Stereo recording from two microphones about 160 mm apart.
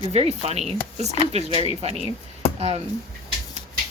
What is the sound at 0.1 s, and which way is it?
Speech, 40° right (ahead or behind).